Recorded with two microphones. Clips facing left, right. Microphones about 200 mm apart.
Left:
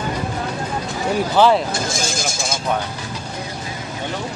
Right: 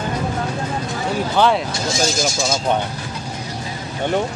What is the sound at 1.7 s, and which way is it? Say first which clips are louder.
Speech: right 3 dB; 50° left (ahead or behind).